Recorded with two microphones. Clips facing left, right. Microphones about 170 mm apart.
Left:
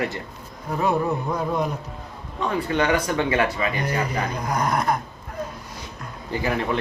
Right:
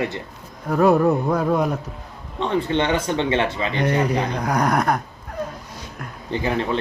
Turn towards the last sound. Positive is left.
turn(degrees=-25)  # may be behind; listen again after turning